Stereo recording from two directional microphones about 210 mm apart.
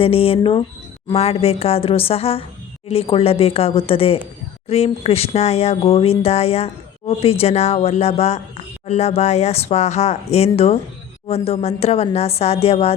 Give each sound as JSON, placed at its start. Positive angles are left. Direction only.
{"t": 0.0, "sound": "a woman's voice", "side_deg": 25}